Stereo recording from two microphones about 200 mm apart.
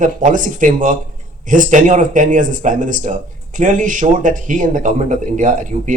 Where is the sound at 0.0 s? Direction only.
40° right (ahead or behind).